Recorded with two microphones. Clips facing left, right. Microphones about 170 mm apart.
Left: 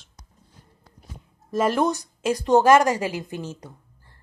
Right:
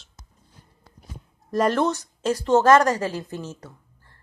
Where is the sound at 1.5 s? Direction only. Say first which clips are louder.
Even; 5° left (ahead or behind).